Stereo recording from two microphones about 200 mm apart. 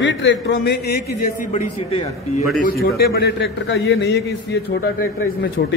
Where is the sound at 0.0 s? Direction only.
65° left (ahead or behind).